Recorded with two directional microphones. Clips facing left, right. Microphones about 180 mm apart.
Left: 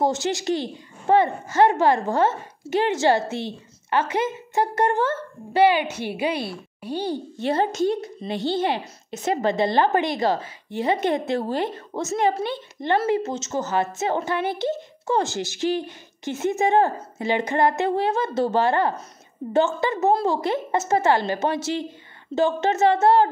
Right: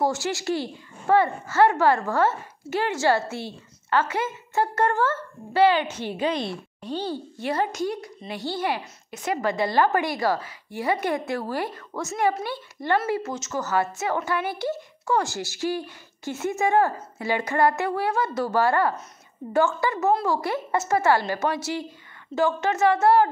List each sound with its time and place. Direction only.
0.0 s a woman's voice: 20° left (ahead or behind)
7.4 s a woman's voice: 25° left (ahead or behind)